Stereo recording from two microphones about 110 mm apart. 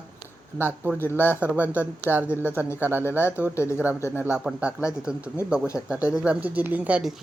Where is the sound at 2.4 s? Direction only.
20° right (ahead or behind).